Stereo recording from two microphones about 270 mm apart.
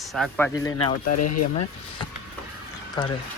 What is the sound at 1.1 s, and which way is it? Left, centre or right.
Speech, left.